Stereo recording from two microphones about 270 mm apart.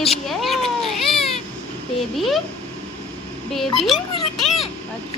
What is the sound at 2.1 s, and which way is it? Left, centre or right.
Speech, centre.